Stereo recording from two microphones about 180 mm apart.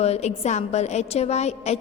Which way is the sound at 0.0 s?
35° left (ahead or behind).